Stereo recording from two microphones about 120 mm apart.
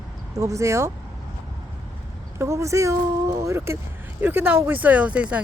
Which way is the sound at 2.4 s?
25° right (ahead or behind).